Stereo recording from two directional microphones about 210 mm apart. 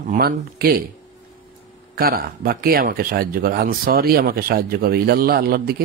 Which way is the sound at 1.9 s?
45° right (ahead or behind).